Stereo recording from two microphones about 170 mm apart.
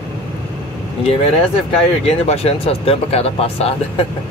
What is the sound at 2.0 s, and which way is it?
Speech, 35° left (ahead or behind).